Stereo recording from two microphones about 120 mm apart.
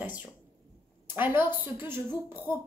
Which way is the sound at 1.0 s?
15° right (ahead or behind).